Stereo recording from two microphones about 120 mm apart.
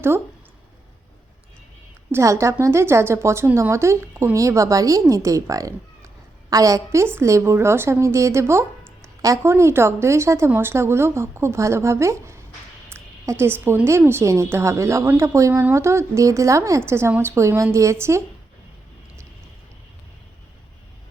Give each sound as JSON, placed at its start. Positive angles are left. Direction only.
{"t": 2.1, "sound": "speech", "side_deg": -25}